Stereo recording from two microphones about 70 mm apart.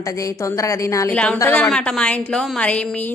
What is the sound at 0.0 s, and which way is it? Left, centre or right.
A woman's voice, left.